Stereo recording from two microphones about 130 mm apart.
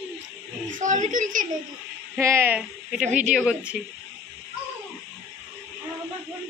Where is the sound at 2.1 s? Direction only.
20° right (ahead or behind).